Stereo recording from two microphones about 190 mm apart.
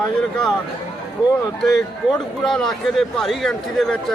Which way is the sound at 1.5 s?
5° left (ahead or behind).